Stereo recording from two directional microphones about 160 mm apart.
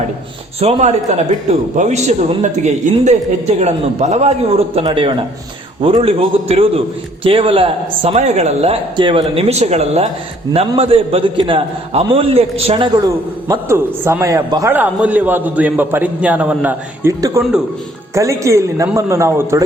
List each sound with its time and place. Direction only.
0.6 s a man's voice: 40° right (ahead or behind)
13.0 s a man's voice: 20° right (ahead or behind)